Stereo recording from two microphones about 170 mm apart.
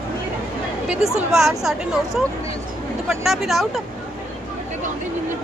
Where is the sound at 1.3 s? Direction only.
Centre (ahead or behind).